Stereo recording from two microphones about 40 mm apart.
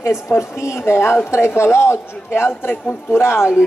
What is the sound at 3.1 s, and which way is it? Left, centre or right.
Speech, left.